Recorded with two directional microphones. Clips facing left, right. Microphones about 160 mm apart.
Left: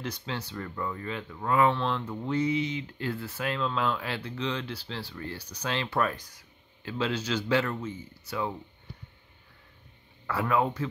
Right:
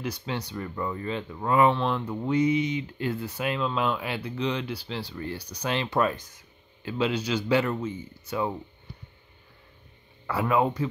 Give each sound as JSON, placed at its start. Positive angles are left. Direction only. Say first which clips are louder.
{"t": 0.0, "sound": "speech", "louder": "right 3 dB", "side_deg": -10}
{"t": 10.2, "sound": "speech", "louder": "right 3 dB", "side_deg": -15}